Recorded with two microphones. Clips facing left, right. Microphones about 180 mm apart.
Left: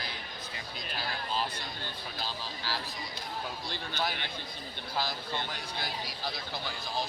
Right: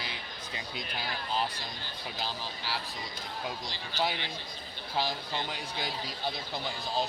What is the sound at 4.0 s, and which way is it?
Speech, 20° right (ahead or behind).